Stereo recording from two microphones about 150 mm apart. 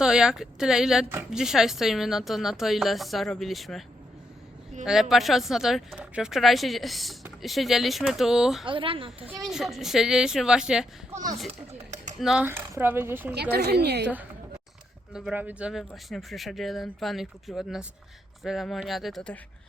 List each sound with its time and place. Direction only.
0.0 s speech: 5° right (ahead or behind)
4.9 s speech: centre (ahead or behind)
8.6 s speech: 35° right (ahead or behind)
9.4 s speech: centre (ahead or behind)
11.7 s a sound: 50° right (ahead or behind)
12.2 s speech: centre (ahead or behind)
12.5 s speech: 15° right (ahead or behind)
13.5 s a woman's voice: 90° right
15.1 s speech: 5° right (ahead or behind)